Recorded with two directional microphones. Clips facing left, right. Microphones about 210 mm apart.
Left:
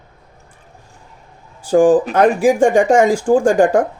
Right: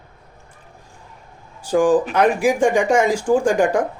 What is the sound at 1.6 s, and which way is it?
A man's voice, 45° left (ahead or behind).